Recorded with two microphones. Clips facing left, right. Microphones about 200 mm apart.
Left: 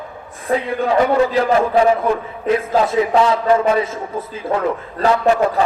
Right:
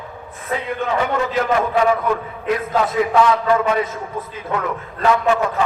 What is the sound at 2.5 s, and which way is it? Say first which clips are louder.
A man's voice: left 3 dB; 25° left (ahead or behind).